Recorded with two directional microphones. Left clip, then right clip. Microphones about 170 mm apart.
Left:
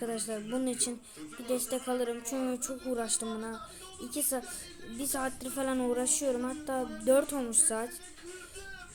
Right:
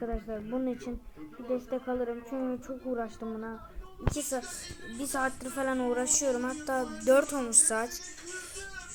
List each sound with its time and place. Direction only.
0.0 s a woman's voice: 20° left (ahead or behind)
4.1 s music: 5° left (ahead or behind)
4.9 s a woman's voice: 10° left (ahead or behind)